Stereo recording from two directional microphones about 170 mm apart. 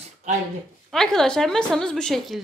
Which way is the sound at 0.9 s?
5° left (ahead or behind).